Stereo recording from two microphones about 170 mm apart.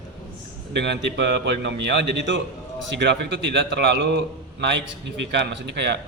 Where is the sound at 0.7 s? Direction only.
90° right.